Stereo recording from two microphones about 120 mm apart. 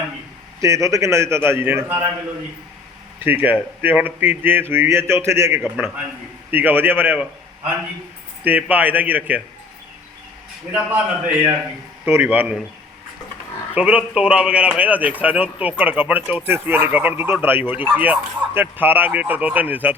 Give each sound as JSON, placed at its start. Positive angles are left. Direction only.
{"t": 0.6, "sound": "a man's voice", "side_deg": -25}
{"t": 3.2, "sound": "speech", "side_deg": -15}
{"t": 8.4, "sound": "speech", "side_deg": -15}
{"t": 10.7, "sound": "speech", "side_deg": -15}
{"t": 13.7, "sound": "speech", "side_deg": -10}